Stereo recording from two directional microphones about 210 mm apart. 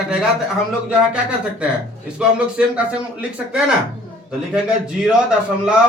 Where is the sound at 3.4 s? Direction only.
5° right (ahead or behind).